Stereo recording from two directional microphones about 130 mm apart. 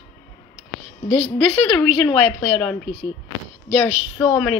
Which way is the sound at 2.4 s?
10° left (ahead or behind).